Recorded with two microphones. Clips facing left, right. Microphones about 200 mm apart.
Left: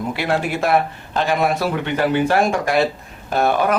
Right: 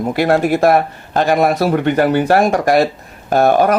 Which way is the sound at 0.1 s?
45° right (ahead or behind).